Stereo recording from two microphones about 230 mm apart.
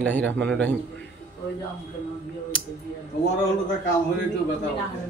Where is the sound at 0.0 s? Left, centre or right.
Centre.